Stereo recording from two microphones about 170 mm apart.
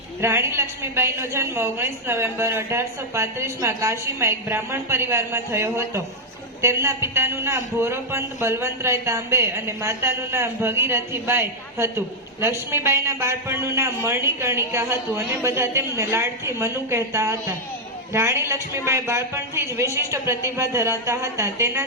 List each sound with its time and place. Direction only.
0.2 s a man's voice: 15° right (ahead or behind)